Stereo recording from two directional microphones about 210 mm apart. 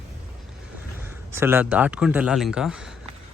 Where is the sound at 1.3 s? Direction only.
10° right (ahead or behind).